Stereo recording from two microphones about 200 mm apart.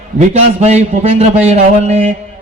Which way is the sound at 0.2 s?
35° right (ahead or behind).